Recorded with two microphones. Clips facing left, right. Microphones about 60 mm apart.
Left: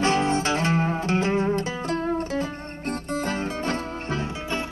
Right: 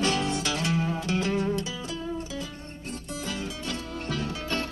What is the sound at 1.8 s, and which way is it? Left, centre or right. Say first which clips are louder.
Music: left 8 dB; left.